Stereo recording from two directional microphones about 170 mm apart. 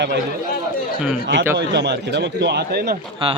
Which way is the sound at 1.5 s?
80° right.